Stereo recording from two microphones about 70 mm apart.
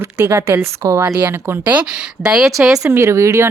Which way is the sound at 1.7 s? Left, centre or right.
Centre.